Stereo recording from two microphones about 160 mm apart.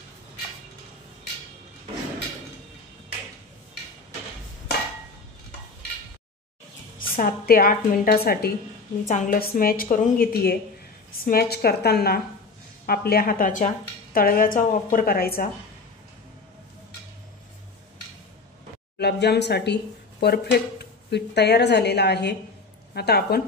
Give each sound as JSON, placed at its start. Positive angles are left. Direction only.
{"t": 7.0, "sound": "a woman's voice", "side_deg": 65}
{"t": 9.0, "sound": "a woman's voice", "side_deg": 50}
{"t": 14.1, "sound": "a woman's voice", "side_deg": 65}
{"t": 18.9, "sound": "a woman's voice", "side_deg": 90}